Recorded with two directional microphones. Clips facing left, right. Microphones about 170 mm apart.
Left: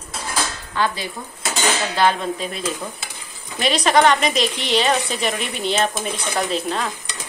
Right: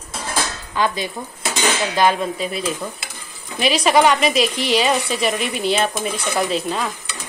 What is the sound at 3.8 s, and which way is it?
A woman's voice, 5° right (ahead or behind).